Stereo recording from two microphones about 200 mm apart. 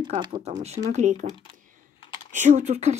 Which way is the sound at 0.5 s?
35° right (ahead or behind).